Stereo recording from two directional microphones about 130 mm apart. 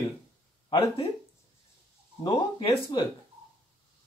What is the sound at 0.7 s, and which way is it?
Speech, 35° left (ahead or behind).